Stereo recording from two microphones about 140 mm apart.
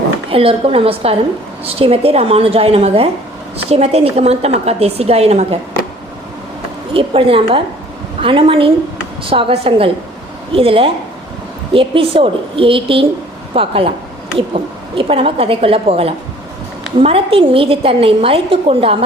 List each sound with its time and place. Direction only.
0.3 s a woman's voice: 40° right (ahead or behind)
6.9 s a woman's voice: 40° right (ahead or behind)